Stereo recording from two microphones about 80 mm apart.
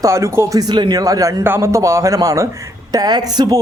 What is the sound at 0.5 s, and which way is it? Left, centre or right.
Speech, right.